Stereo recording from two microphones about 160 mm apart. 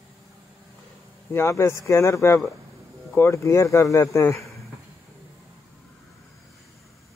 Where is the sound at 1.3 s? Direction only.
15° left (ahead or behind).